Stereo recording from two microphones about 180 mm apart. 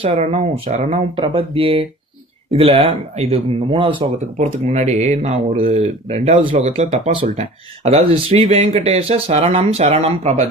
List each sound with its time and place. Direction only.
0.0 s speech: 40° right (ahead or behind)